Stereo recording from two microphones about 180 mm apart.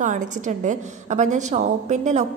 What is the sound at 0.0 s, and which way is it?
A woman's voice, 45° right (ahead or behind).